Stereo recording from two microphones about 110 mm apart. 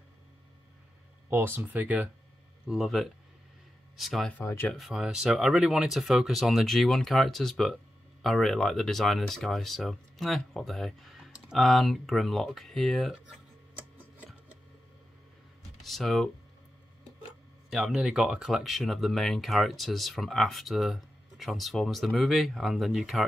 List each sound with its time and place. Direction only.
1.3 s speech: 20° right (ahead or behind); by 13.2 s centre (ahead or behind)
15.8 s speech: centre (ahead or behind)
17.6 s speech: 5° right (ahead or behind)